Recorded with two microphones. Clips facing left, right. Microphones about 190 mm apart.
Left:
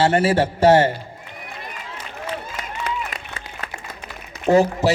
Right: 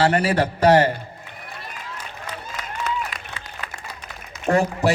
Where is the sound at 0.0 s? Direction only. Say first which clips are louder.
Left 2 dB; 25° left (ahead or behind).